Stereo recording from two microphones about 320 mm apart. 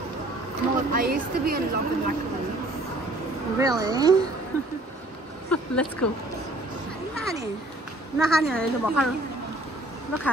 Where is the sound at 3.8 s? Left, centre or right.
Centre.